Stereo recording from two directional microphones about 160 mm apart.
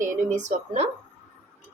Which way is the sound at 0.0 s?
50° right (ahead or behind).